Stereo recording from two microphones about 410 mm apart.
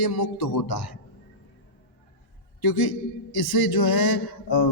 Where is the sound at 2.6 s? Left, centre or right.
Left.